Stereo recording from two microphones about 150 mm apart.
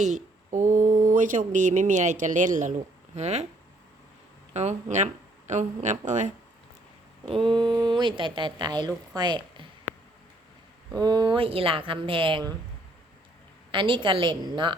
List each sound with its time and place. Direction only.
0.0 s speech: 55° right (ahead or behind)
4.5 s speech: 50° right (ahead or behind)
7.3 s speech: 35° right (ahead or behind)
10.9 s speech: 25° right (ahead or behind)
13.7 s speech: 35° right (ahead or behind)